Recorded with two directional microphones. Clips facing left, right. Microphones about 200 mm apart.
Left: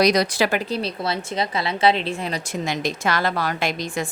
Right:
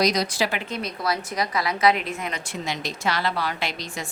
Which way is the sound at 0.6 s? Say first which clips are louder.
Left 4 dB; 30° left (ahead or behind).